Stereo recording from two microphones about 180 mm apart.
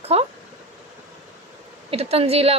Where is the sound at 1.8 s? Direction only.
35° right (ahead or behind).